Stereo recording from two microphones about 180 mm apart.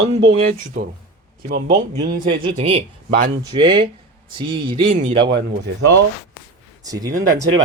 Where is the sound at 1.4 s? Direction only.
60° right (ahead or behind).